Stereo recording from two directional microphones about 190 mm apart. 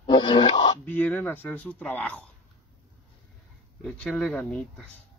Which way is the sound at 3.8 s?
5° left (ahead or behind).